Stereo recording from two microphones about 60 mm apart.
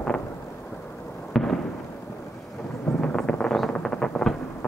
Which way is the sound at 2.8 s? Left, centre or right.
Centre.